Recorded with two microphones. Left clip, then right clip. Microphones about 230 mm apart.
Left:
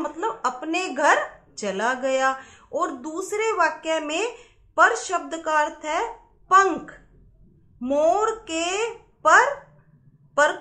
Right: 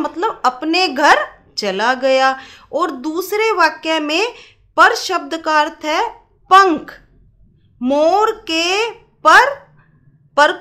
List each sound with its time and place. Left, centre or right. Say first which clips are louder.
0.0 s a woman's voice: right 9 dB; right